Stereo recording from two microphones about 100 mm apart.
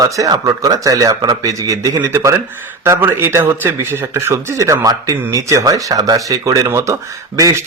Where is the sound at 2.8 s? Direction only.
25° right (ahead or behind).